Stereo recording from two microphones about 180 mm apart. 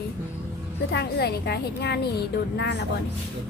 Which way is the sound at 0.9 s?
65° left (ahead or behind).